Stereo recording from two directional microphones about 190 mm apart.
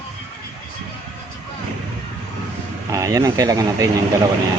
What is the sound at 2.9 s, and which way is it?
Speech, 15° right (ahead or behind).